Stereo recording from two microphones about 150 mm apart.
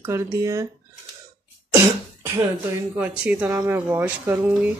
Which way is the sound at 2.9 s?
10° right (ahead or behind).